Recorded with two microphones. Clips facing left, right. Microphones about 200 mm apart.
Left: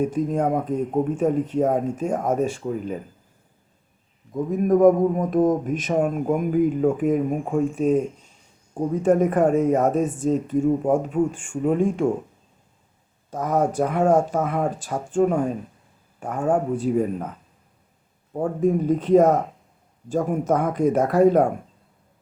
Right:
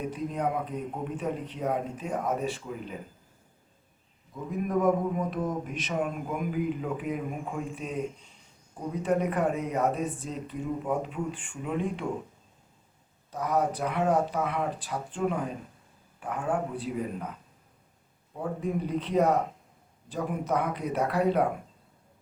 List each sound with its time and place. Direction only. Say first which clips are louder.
0.0 s speech: left 9 dB; 45° left (ahead or behind)
4.5 s speech: left 10 dB; 45° left (ahead or behind)
13.3 s speech: left 6 dB; 45° left (ahead or behind)
18.3 s speech: left 10 dB; 45° left (ahead or behind)